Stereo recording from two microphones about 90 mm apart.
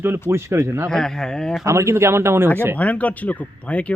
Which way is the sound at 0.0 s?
25° right (ahead or behind).